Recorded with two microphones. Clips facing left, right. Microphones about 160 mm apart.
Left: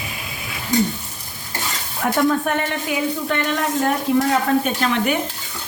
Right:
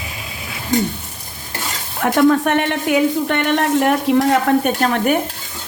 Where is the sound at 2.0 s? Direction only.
70° right (ahead or behind).